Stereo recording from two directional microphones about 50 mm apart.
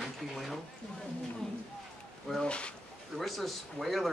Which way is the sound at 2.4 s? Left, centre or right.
Left.